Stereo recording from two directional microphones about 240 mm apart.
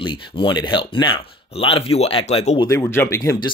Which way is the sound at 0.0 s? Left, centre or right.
Centre.